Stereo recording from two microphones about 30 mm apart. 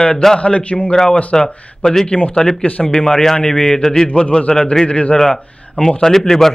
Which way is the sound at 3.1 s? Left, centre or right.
Centre.